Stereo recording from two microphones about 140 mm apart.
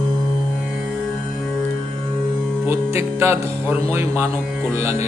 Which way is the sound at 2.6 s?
20° right (ahead or behind).